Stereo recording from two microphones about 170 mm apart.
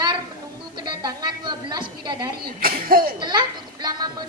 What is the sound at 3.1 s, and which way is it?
A woman's voice, 25° right (ahead or behind).